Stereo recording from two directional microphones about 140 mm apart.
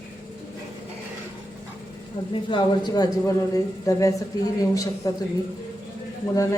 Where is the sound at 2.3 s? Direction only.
35° left (ahead or behind).